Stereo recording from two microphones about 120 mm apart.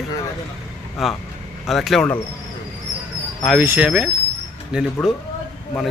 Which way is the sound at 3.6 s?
20° right (ahead or behind).